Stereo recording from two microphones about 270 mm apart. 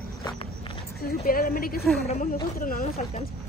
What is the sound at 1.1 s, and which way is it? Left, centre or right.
A woman's voice, left.